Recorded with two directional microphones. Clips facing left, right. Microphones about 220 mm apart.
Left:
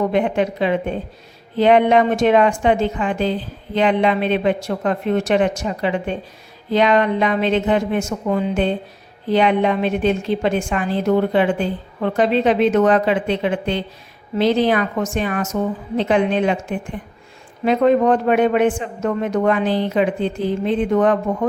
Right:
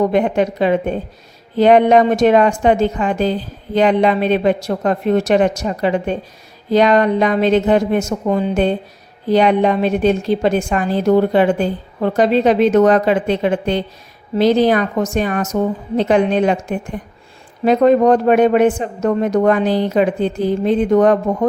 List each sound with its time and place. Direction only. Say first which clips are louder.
0.1 s a woman's voice: right 3 dB; 40° right (ahead or behind)